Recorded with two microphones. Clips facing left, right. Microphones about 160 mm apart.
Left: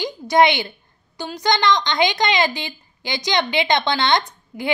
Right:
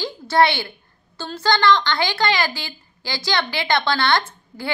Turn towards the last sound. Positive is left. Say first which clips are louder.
# left 3 dB
turn(degrees=20)  # may be behind; listen again after turning